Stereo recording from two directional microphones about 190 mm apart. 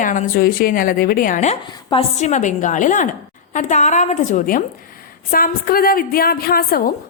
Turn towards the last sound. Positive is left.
turn(degrees=50)  # may be behind; listen again after turning